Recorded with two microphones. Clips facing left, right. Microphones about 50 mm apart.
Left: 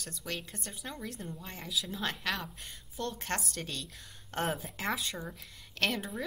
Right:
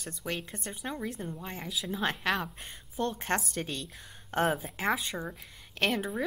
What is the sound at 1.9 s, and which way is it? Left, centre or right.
A woman's voice, right.